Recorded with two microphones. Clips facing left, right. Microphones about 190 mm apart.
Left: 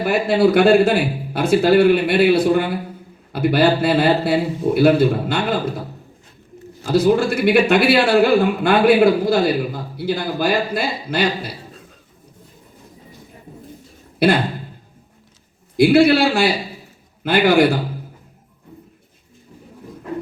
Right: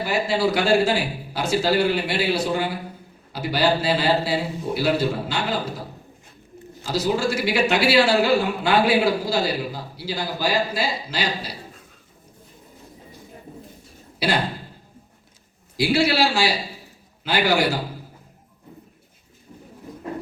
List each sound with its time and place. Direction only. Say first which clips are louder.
0.0 s a man's voice: left 6 dB; 55° left (ahead or behind)
6.8 s a man's voice: left 7 dB; 55° left (ahead or behind)
14.2 s speech: left 8 dB; 55° left (ahead or behind)
15.8 s a man's voice: left 8 dB; 55° left (ahead or behind)